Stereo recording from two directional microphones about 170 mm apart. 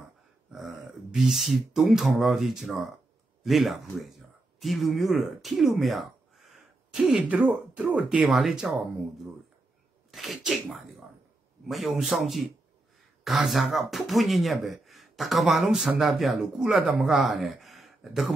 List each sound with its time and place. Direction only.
0.5 s speech: centre (ahead or behind)